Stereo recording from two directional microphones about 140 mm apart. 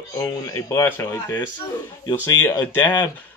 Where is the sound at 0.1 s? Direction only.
25° left (ahead or behind).